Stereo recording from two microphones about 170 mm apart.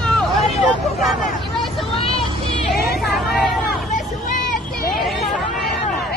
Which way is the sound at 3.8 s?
50° left (ahead or behind).